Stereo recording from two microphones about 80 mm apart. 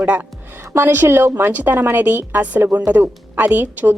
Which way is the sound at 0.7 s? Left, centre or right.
Right.